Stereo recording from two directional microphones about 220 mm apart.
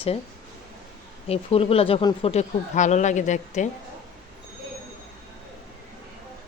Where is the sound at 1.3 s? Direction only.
25° left (ahead or behind).